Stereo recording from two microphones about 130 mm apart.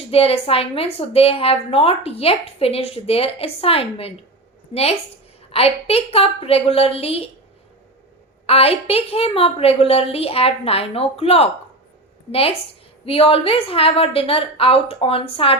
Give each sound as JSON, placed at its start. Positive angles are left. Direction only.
{"t": 0.1, "sound": "a woman's voice", "side_deg": 50}
{"t": 8.4, "sound": "a woman's voice", "side_deg": 50}